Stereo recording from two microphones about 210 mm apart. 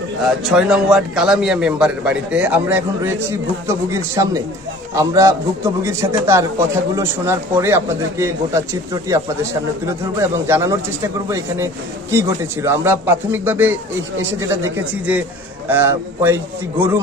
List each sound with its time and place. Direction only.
0.4 s a man's voice: 5° right (ahead or behind)